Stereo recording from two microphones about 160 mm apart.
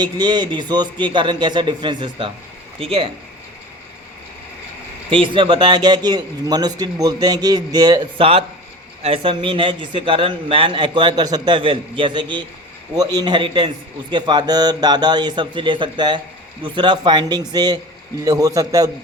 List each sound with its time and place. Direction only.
0.0 s a man's voice: 25° right (ahead or behind)
5.1 s a man's voice: 30° right (ahead or behind)